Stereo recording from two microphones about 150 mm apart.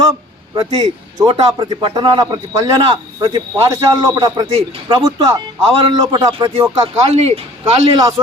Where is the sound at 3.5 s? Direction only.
20° right (ahead or behind).